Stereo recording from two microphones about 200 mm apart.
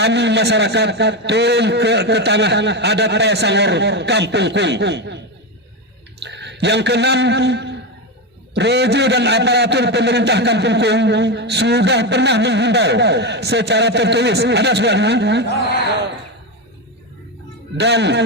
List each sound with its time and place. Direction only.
0.0 s a man's voice: 60° right (ahead or behind)
6.2 s a man's voice: 60° right (ahead or behind)
17.7 s a man's voice: 60° right (ahead or behind)